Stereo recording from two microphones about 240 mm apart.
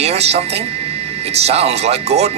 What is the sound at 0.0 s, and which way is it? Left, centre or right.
Speech, right.